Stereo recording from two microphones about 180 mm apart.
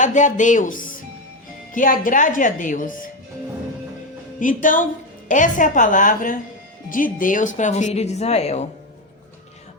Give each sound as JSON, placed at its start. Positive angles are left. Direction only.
{"t": 0.0, "sound": "speech", "side_deg": 45}
{"t": 4.4, "sound": "speech", "side_deg": 50}